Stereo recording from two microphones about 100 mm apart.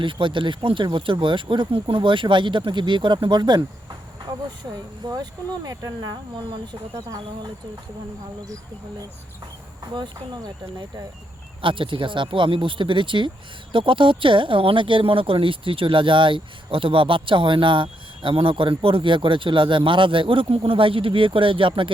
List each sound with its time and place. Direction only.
0.0 s speech: 55° right (ahead or behind)
9.9 s speech: 45° right (ahead or behind)
11.6 s speech: 60° right (ahead or behind)